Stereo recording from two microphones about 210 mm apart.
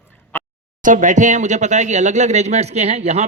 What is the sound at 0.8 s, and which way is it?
Speech, 35° right (ahead or behind).